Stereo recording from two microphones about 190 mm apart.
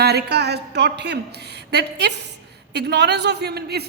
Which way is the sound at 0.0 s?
60° right (ahead or behind).